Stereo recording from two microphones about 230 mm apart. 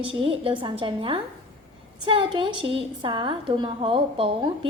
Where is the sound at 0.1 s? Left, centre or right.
Right.